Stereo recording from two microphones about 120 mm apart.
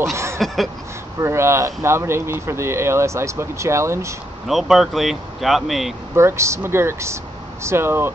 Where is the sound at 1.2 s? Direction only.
20° right (ahead or behind).